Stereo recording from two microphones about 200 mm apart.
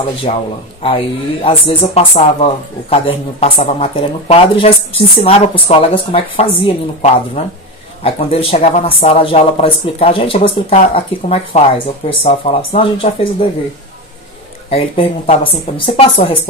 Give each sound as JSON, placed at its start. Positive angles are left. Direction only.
{"t": 0.3, "sound": "a man's voice", "side_deg": 30}
{"t": 14.7, "sound": "speech", "side_deg": 30}